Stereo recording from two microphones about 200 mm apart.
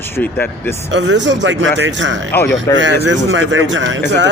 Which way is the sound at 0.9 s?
65° right (ahead or behind).